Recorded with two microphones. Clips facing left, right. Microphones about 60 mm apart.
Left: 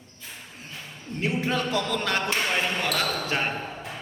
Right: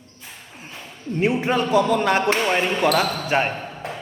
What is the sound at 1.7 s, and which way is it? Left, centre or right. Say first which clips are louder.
A man's voice: right 8 dB; centre.